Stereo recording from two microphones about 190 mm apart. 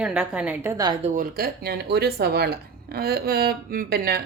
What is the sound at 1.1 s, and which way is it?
Speech, 50° right (ahead or behind).